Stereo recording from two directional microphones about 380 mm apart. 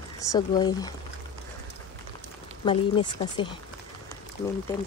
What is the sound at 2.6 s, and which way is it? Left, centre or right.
Speech, centre.